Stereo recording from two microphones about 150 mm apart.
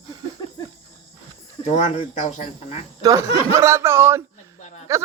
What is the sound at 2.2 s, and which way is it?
Speech, 50° left (ahead or behind).